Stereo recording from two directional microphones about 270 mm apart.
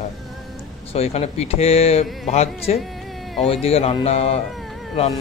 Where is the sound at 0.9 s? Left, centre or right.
Left.